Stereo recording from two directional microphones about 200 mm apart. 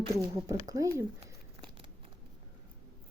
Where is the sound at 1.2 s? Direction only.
25° right (ahead or behind).